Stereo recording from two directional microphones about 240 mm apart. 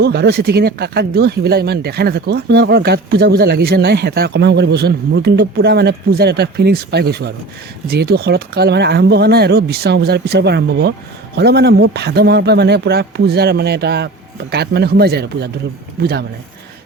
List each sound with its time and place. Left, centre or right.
0.0 s speech: right